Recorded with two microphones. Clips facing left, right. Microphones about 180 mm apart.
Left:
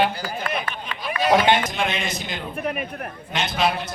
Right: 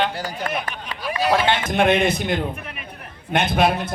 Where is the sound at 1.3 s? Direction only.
15° left (ahead or behind).